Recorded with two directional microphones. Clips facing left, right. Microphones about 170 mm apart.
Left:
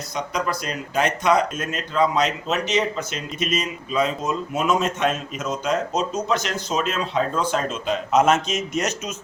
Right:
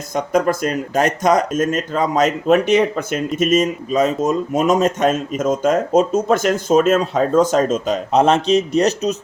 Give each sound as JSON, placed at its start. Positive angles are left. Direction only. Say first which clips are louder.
{"t": 0.1, "sound": "speech", "louder": "right 9 dB", "side_deg": -50}